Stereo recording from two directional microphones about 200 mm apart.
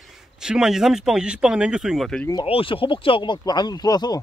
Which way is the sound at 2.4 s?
25° left (ahead or behind).